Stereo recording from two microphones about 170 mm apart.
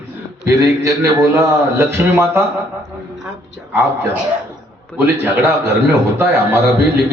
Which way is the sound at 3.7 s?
15° right (ahead or behind).